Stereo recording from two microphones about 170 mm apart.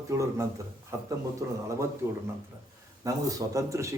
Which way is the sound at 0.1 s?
15° right (ahead or behind).